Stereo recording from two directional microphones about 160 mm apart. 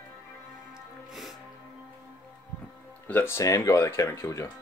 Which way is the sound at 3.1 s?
15° left (ahead or behind).